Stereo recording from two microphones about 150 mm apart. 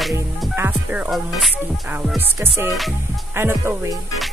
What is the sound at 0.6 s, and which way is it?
Speech, 10° right (ahead or behind).